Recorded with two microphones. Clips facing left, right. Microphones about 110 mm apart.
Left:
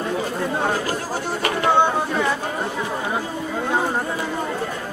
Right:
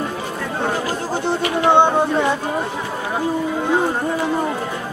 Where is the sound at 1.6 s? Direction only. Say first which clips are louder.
Right 4 dB; 25° right (ahead or behind).